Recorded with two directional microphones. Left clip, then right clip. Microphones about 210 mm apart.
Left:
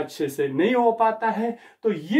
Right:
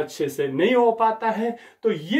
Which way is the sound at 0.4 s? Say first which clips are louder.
Right 2 dB; 5° left (ahead or behind).